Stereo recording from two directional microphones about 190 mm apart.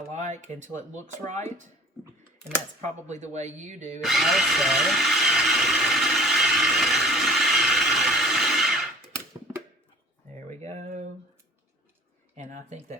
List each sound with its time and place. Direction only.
0.1 s speech: 40° right (ahead or behind)
2.8 s speech: 35° right (ahead or behind)
4.0 s blender: centre (ahead or behind)
10.6 s a sound: 40° right (ahead or behind)
12.4 s speech: 35° right (ahead or behind)